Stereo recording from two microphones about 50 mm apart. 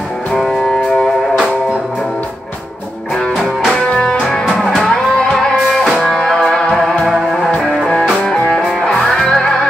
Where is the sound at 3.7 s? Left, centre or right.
Centre.